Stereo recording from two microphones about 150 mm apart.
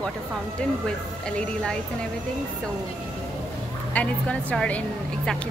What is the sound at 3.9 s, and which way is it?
Speech, 10° left (ahead or behind).